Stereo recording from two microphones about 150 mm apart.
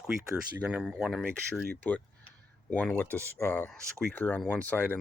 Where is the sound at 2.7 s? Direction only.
10° left (ahead or behind).